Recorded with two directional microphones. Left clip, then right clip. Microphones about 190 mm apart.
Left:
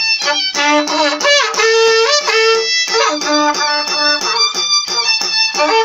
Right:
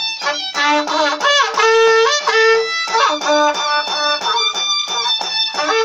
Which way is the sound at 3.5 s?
10° right (ahead or behind).